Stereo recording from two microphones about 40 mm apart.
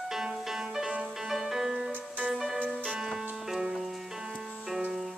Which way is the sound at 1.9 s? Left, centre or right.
Right.